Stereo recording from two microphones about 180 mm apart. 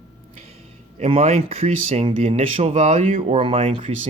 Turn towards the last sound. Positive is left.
turn(degrees=-35)  # may be behind; listen again after turning